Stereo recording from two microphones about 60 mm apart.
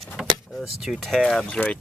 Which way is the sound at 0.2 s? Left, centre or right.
Centre.